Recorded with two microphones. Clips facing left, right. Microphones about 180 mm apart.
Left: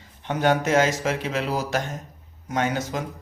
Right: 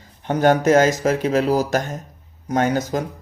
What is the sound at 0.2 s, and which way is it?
A man's voice, 45° right (ahead or behind).